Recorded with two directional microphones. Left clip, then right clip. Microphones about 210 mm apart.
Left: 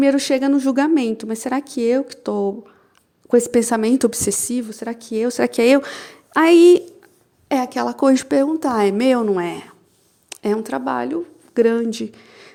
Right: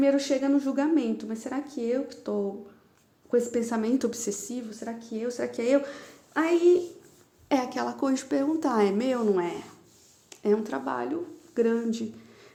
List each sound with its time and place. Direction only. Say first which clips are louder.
0.0 s a woman's voice: left 7 dB; 45° left (ahead or behind)
7.4 s a woman's voice: left 7 dB; 35° left (ahead or behind)